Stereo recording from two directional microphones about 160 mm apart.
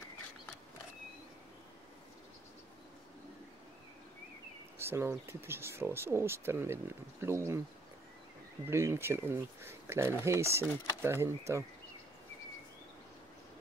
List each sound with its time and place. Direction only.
4.7 s speech: 15° right (ahead or behind)
8.6 s speech: 15° right (ahead or behind)